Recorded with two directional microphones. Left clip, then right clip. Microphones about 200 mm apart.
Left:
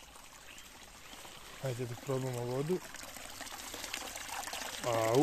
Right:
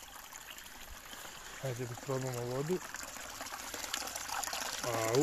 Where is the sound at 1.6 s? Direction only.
10° left (ahead or behind).